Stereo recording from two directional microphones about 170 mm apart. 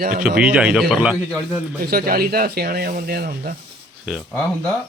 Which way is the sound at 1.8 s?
60° right (ahead or behind).